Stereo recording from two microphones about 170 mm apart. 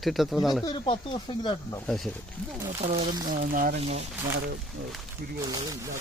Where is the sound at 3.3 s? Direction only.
55° right (ahead or behind).